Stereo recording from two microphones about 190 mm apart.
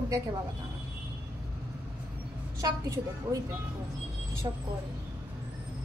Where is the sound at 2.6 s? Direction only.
20° right (ahead or behind).